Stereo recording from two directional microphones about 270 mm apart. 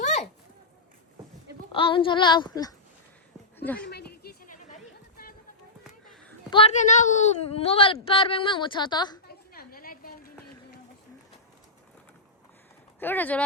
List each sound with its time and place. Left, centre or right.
0.0 s a sound: left
1.7 s a woman's voice: centre
3.8 s chatter: left
6.5 s a woman's voice: left
9.2 s a sound: left
13.0 s a woman's voice: centre